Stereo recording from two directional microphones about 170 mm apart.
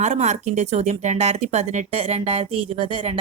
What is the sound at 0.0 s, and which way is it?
Speech, 40° right (ahead or behind).